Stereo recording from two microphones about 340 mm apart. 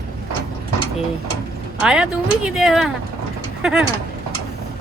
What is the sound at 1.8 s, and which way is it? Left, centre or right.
Speech, centre.